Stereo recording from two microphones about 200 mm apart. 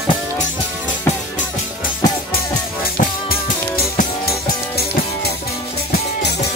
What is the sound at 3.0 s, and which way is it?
Music, 45° left (ahead or behind).